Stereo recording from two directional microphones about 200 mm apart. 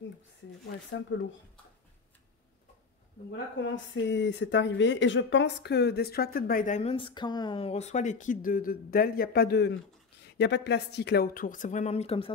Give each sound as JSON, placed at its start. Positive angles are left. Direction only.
{"t": 1.1, "sound": "speech", "side_deg": 75}
{"t": 3.7, "sound": "speech", "side_deg": 65}